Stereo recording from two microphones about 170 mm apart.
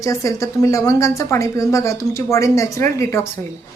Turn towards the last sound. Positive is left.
turn(degrees=15)  # may be behind; listen again after turning